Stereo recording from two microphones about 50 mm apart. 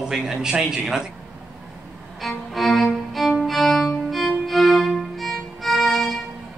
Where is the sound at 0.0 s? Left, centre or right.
Centre.